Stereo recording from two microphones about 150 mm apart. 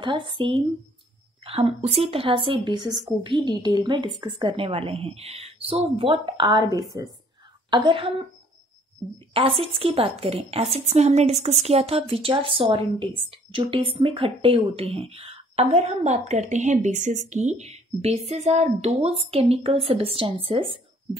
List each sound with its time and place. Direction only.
0.0 s a woman's voice: 30° right (ahead or behind)
9.3 s a woman's voice: 40° right (ahead or behind)